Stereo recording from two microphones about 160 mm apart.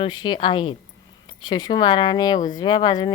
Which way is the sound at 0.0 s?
30° left (ahead or behind).